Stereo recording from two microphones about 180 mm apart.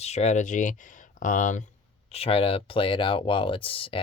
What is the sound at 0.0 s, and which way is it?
Speech, 35° left (ahead or behind).